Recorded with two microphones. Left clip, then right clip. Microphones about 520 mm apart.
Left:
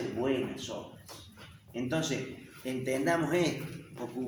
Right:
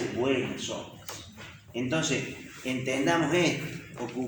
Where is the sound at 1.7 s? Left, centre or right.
Left.